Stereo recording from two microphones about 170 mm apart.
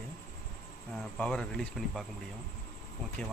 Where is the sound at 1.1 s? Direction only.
5° left (ahead or behind).